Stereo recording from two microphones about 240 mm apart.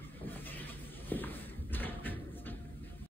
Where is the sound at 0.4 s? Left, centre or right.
Centre.